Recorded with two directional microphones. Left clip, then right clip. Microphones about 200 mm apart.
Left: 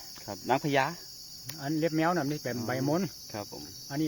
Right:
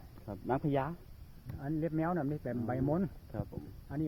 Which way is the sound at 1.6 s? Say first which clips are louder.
Left 7 dB; 35° left (ahead or behind).